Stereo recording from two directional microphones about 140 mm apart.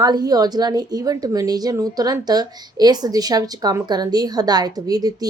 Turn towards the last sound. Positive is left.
turn(degrees=-25)  # may be behind; listen again after turning